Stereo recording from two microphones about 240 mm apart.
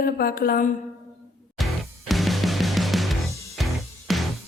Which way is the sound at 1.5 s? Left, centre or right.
Centre.